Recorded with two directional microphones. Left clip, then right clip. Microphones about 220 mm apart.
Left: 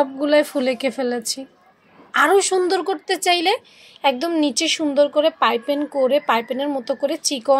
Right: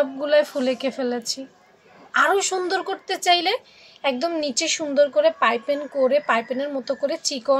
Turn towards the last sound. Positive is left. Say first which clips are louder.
# left 3 dB
turn(degrees=30)  # may be behind; listen again after turning